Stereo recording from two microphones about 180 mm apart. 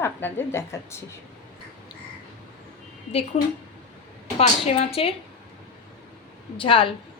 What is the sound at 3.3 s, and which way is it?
A woman's voice, 30° left (ahead or behind).